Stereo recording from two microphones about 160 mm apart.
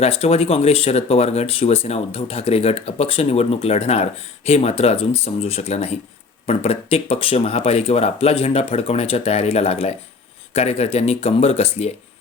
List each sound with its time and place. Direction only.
0.0 s speech: 40° left (ahead or behind)